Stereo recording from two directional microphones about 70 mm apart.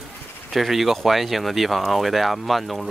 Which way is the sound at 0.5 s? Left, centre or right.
Centre.